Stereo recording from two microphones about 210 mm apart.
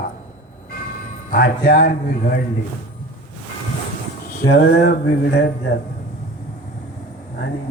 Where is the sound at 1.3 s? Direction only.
40° left (ahead or behind).